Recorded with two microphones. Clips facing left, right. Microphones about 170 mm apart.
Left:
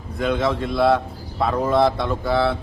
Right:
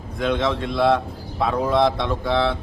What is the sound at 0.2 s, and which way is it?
A man's voice, 5° left (ahead or behind).